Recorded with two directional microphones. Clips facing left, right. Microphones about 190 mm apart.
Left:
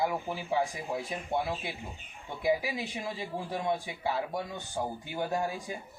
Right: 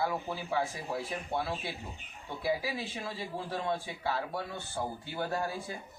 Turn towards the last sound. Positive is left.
turn(degrees=15)  # may be behind; listen again after turning